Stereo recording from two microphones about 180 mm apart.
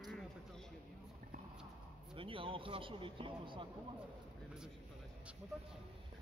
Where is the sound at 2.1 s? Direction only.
30° right (ahead or behind).